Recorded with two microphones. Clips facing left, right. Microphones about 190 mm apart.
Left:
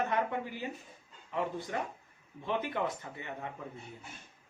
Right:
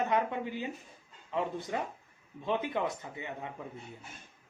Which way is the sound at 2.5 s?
15° right (ahead or behind).